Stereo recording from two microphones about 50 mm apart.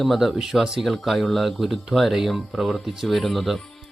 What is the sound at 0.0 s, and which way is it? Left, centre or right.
Speech, centre.